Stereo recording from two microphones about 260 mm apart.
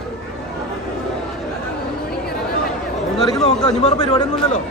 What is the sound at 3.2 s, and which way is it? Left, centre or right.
Speech, centre.